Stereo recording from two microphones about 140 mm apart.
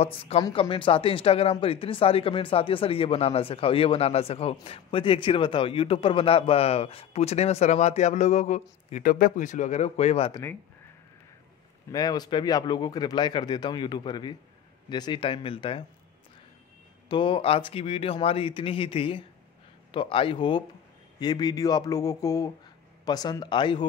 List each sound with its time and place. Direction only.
0.4 s a man's voice: 35° left (ahead or behind); by 9.1 s 55° left (ahead or behind)
9.1 s speech: 70° left (ahead or behind); by 10.3 s 50° left (ahead or behind)
11.9 s speech: 30° left (ahead or behind)
17.1 s speech: 35° left (ahead or behind)